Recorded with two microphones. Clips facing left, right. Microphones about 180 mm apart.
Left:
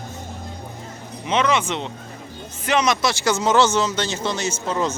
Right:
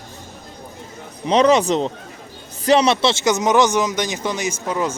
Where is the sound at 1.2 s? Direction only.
35° right (ahead or behind).